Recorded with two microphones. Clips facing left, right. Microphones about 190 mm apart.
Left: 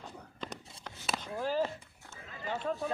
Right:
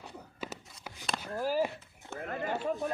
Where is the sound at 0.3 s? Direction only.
5° right (ahead or behind).